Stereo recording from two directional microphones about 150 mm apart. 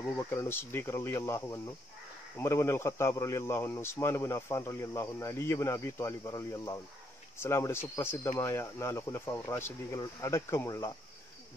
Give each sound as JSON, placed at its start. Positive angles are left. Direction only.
{"t": 0.1, "sound": "speech", "side_deg": 15}